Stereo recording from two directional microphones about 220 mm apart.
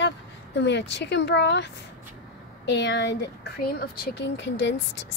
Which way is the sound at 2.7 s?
55° left (ahead or behind).